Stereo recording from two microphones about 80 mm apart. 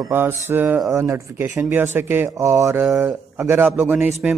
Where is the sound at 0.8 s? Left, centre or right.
Right.